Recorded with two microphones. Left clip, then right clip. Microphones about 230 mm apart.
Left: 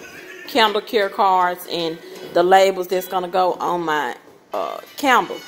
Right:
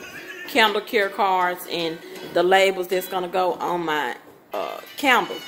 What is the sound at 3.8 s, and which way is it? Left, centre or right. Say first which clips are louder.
Speech: left 3 dB; centre.